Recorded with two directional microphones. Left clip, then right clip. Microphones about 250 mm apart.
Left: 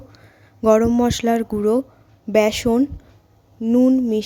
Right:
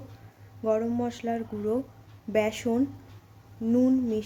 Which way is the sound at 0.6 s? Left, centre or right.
Left.